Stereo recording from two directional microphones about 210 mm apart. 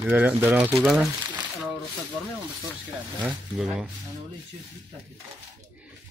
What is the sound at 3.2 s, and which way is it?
Speech, 5° right (ahead or behind).